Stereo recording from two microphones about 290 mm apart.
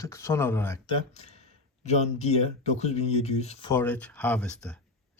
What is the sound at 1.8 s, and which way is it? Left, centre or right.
Speech, left.